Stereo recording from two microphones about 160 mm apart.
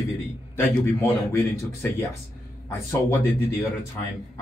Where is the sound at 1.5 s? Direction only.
15° left (ahead or behind).